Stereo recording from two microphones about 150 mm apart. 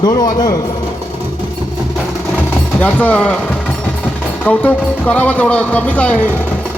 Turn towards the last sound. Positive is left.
turn(degrees=10)  # may be behind; listen again after turning